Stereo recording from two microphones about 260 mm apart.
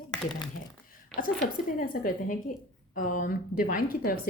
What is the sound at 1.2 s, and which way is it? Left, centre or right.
Speech, left.